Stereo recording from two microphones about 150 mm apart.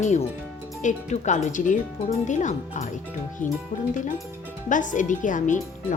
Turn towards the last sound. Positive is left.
turn(degrees=55)  # may be behind; listen again after turning